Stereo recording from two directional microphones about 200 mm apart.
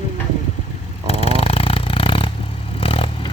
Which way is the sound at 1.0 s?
30° left (ahead or behind).